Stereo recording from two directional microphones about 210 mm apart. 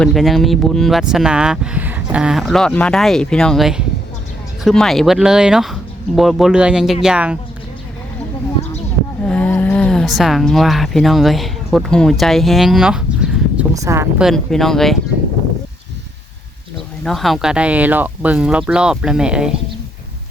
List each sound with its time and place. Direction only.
0.0 s speech: centre (ahead or behind)
9.2 s speech: 5° left (ahead or behind)
13.6 s speech: 15° right (ahead or behind)
14.3 s speech: centre (ahead or behind)
17.0 s speech: centre (ahead or behind)